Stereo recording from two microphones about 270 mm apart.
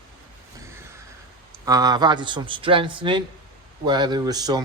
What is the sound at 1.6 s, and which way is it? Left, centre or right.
Speech, centre.